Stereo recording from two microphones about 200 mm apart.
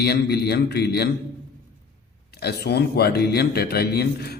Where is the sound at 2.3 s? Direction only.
55° left (ahead or behind).